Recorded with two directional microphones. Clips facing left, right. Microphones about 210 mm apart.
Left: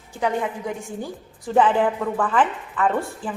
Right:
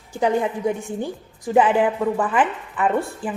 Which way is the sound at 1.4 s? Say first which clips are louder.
Right 1 dB; 10° right (ahead or behind).